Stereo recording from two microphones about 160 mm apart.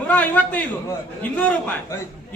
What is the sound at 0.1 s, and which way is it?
A man's voice, 10° left (ahead or behind).